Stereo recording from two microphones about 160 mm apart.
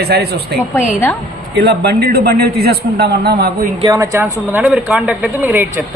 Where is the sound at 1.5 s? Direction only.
85° right.